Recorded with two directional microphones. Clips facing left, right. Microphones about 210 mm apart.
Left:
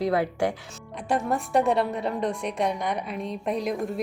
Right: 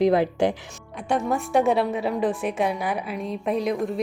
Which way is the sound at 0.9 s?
Centre (ahead or behind).